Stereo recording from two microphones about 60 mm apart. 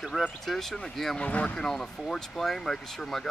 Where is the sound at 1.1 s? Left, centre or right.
Left.